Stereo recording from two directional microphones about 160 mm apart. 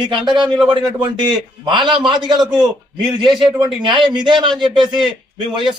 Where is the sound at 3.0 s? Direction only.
30° right (ahead or behind).